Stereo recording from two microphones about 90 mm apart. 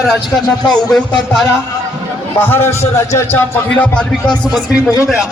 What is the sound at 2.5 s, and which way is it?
Speech, 30° left (ahead or behind).